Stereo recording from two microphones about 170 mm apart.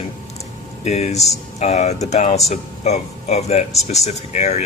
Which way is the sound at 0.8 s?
40° left (ahead or behind).